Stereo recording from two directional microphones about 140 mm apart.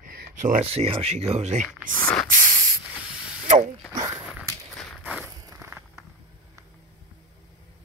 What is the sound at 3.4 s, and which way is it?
Drill, 60° right (ahead or behind).